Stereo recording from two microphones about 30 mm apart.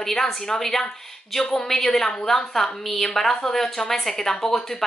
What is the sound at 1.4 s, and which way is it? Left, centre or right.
Speech, left.